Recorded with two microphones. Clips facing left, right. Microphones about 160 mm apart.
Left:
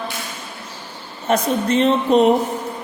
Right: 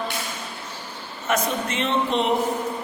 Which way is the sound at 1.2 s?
35° left (ahead or behind).